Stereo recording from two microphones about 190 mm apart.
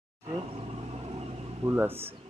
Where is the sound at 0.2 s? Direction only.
30° right (ahead or behind).